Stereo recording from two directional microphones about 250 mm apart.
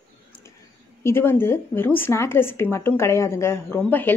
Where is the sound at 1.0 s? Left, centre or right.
Centre.